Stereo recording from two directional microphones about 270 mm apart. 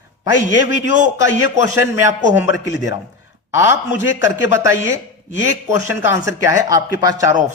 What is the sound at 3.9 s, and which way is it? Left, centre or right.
Speech, left.